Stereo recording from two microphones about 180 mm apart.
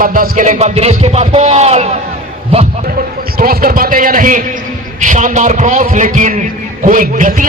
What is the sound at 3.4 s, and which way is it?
A man's voice, 55° right (ahead or behind).